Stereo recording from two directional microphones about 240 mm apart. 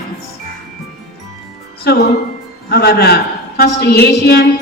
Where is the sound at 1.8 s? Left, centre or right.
Left.